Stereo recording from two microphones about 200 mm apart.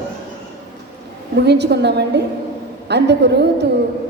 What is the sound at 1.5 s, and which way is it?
A woman's voice, 55° right (ahead or behind).